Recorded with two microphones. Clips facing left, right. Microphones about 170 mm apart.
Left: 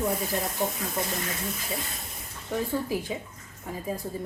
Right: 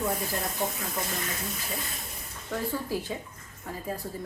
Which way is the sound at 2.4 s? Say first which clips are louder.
Left 3 dB; 15° left (ahead or behind).